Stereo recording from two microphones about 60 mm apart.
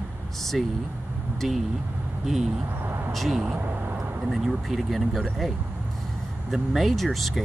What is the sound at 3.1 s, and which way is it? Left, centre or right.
Speech, centre.